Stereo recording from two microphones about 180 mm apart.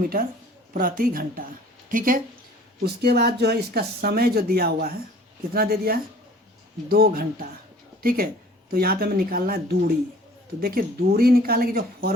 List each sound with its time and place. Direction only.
0.0 s a woman's voice: 50° right (ahead or behind)
2.8 s speech: 60° right (ahead or behind)